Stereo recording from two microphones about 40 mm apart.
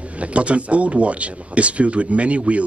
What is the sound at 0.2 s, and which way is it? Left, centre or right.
Speech, right.